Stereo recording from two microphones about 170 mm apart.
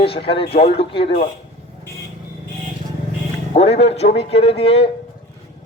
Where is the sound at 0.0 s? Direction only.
35° left (ahead or behind).